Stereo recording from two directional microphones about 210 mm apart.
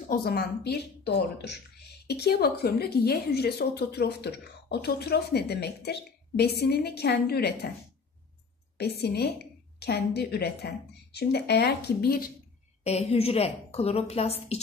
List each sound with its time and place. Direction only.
0.0 s a woman's voice: 45° left (ahead or behind)
8.7 s a woman's voice: 50° left (ahead or behind)
12.8 s a woman's voice: 30° left (ahead or behind)